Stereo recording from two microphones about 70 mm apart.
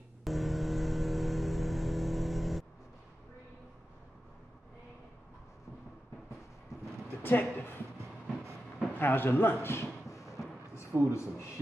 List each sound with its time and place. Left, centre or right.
0.2 s vehicle: centre
7.2 s a woman's voice: left
8.9 s speech: left
10.0 s a sound: left
10.9 s a man's voice: right